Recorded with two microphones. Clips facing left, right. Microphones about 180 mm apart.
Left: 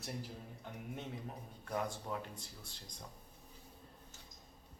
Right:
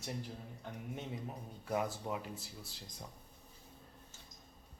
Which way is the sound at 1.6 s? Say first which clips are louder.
Right 3 dB; 5° right (ahead or behind).